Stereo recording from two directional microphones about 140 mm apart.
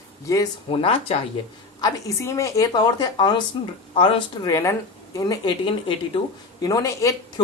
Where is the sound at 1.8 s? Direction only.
20° left (ahead or behind); by 4.2 s 35° left (ahead or behind).